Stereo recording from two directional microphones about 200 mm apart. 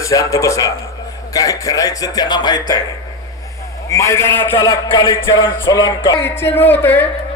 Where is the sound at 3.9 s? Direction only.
15° left (ahead or behind).